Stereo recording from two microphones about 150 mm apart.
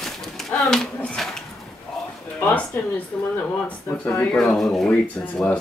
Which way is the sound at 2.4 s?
10° left (ahead or behind).